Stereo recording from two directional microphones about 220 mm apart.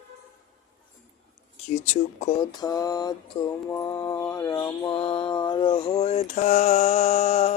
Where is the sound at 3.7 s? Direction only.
15° left (ahead or behind).